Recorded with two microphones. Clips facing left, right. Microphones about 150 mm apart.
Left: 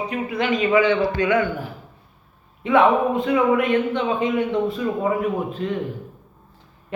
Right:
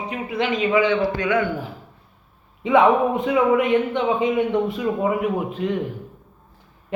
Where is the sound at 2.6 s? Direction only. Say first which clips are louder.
Right 1 dB; 15° right (ahead or behind).